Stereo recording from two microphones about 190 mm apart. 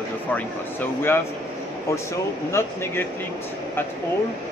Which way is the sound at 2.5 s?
10° left (ahead or behind).